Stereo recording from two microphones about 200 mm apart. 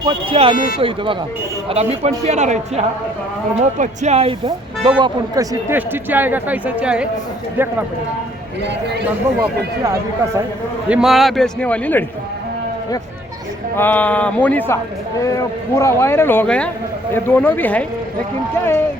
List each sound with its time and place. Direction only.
0.0 s a man's voice: 25° right (ahead or behind); by 7.1 s 5° right (ahead or behind)
9.8 s speech: 15° right (ahead or behind)
10.8 s a man's voice: 5° right (ahead or behind)
13.7 s speech: 10° left (ahead or behind)